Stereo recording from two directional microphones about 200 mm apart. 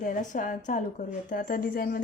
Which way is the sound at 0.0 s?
40° left (ahead or behind).